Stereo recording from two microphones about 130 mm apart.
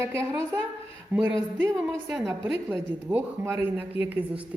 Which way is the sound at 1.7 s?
Centre (ahead or behind).